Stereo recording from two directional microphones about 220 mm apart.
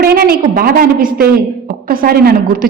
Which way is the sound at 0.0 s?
45° right (ahead or behind).